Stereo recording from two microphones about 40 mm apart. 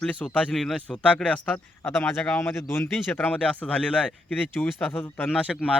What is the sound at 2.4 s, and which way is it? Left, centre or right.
Speech, left.